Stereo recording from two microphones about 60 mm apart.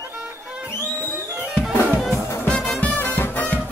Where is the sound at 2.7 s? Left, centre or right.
Left.